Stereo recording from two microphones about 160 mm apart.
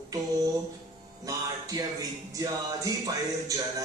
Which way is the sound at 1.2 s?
20° right (ahead or behind).